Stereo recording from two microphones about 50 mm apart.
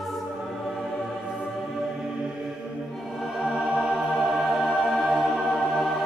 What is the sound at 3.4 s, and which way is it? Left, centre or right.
Music, centre.